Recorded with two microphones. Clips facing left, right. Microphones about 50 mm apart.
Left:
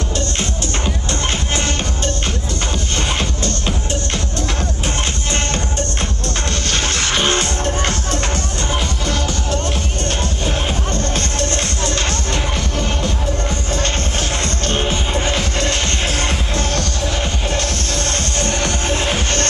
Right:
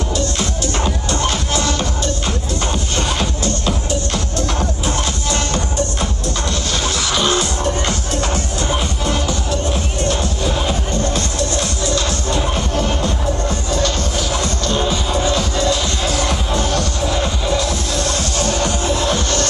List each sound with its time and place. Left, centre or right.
0.1 s music: left
3.0 s music: left
10.0 s music: left
13.7 s music: left